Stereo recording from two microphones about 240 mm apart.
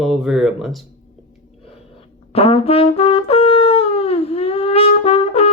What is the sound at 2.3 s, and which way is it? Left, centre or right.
Brass instrument, left.